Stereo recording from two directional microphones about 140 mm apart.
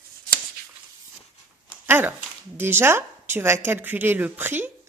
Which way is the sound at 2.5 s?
15° right (ahead or behind).